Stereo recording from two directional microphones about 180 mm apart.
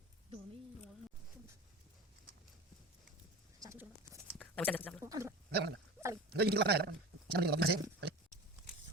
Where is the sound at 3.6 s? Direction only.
15° right (ahead or behind).